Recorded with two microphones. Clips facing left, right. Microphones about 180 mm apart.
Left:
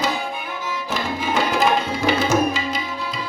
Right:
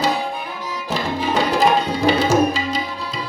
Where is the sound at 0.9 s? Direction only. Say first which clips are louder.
Right 3 dB; 35° right (ahead or behind).